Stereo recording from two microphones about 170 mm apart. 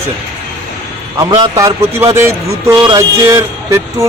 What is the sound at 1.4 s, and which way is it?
A man's voice, 20° right (ahead or behind).